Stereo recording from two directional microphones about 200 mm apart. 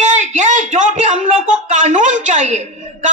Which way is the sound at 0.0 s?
35° right (ahead or behind).